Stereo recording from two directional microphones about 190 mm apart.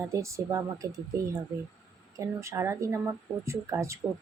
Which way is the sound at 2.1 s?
15° right (ahead or behind).